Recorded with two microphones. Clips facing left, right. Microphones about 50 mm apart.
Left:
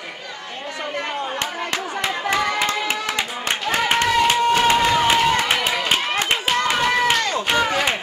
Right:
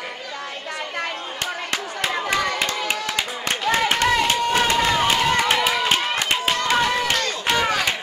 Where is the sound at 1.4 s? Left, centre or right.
Left.